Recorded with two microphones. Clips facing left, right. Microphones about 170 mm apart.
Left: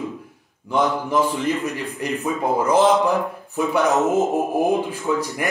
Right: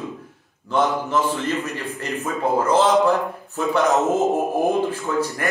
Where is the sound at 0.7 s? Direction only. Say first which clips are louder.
Even; 15° left (ahead or behind).